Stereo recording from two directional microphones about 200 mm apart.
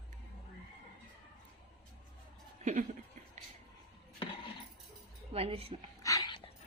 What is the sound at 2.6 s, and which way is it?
Chuckle, 35° right (ahead or behind).